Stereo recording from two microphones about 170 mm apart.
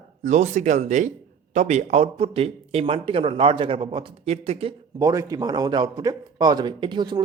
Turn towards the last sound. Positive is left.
turn(degrees=-25)  # may be behind; listen again after turning